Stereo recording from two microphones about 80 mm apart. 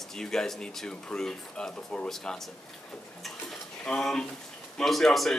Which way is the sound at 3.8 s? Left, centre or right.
Centre.